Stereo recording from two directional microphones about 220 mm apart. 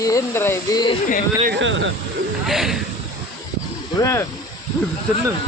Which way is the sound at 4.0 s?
15° left (ahead or behind).